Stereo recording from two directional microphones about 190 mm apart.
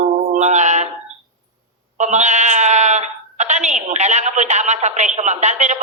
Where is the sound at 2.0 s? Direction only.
40° right (ahead or behind).